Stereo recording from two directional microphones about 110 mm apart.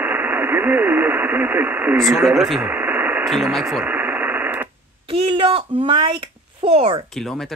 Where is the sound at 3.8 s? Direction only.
15° right (ahead or behind).